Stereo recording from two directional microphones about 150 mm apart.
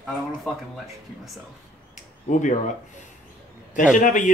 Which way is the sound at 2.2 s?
55° left (ahead or behind).